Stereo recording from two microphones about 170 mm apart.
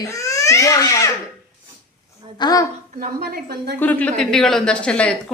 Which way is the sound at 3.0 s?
65° right (ahead or behind).